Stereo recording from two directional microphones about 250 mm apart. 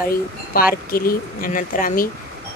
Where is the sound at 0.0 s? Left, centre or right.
Left.